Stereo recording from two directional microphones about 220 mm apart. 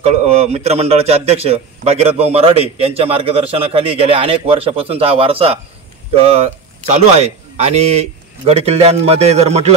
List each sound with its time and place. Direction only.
0.0 s a man's voice: 30° right (ahead or behind)
6.9 s a man's voice: 30° right (ahead or behind)